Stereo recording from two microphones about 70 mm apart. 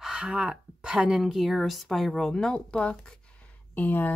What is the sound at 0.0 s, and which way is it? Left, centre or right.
Speech, centre.